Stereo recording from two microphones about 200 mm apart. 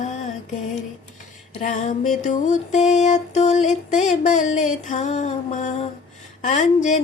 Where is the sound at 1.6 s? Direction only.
40° left (ahead or behind).